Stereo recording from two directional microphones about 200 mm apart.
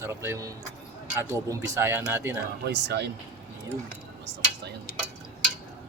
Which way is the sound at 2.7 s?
60° right (ahead or behind).